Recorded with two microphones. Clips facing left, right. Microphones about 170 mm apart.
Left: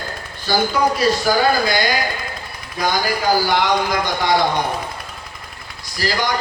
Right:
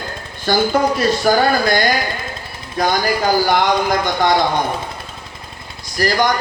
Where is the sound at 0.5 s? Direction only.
50° right (ahead or behind).